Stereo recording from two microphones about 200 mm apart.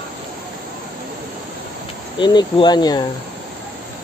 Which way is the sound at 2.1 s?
25° left (ahead or behind).